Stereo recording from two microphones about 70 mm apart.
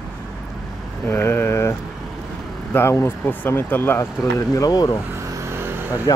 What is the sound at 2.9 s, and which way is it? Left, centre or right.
Speech, left.